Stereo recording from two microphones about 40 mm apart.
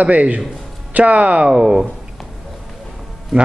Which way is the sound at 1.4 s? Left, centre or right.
Right.